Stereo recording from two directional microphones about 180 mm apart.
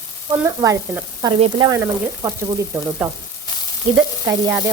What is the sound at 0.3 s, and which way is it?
Speech, 20° right (ahead or behind).